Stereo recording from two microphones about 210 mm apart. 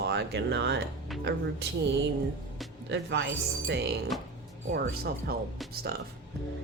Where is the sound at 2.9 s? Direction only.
60° right (ahead or behind).